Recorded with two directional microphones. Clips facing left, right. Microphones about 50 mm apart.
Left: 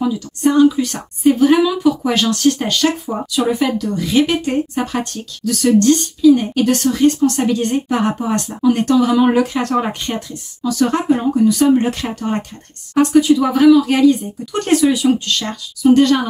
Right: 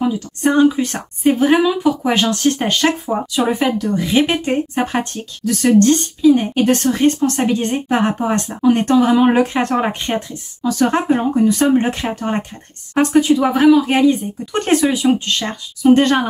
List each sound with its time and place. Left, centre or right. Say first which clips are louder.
0.4 s a woman's voice: left 1 dB; right
7.4 s a woman's voice: left 1 dB; right